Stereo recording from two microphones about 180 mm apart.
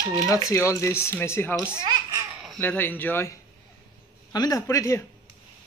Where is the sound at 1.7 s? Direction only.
25° right (ahead or behind).